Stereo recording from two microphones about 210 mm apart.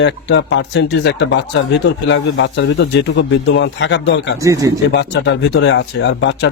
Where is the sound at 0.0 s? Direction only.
60° left (ahead or behind).